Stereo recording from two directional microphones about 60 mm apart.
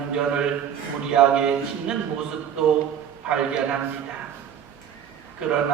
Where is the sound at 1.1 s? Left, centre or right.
Centre.